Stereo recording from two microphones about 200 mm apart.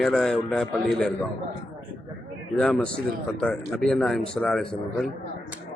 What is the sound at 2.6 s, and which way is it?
A man's voice, centre (ahead or behind).